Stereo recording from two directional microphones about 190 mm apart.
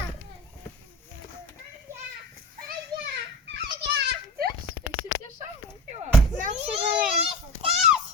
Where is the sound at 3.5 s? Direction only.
60° right (ahead or behind).